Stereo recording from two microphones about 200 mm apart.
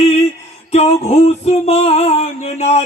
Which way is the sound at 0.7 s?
30° left (ahead or behind).